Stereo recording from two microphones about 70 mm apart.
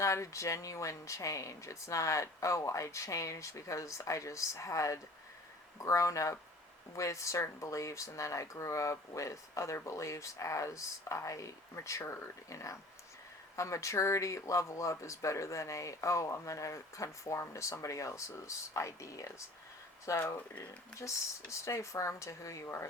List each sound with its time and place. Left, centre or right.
0.0 s speech: left
20.1 s speech: left
21.5 s speech: left